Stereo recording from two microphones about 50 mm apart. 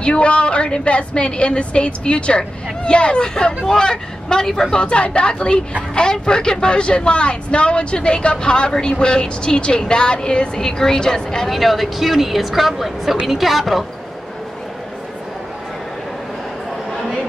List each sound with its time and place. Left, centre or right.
0.0 s a woman's voice: left
11.5 s speech: centre